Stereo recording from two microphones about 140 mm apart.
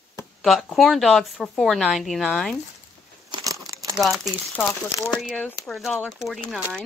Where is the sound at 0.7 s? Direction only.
Centre (ahead or behind).